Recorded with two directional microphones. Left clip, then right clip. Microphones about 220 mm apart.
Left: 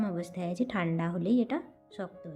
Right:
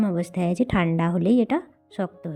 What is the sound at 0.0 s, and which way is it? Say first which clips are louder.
Speech: right 9 dB; 35° right (ahead or behind).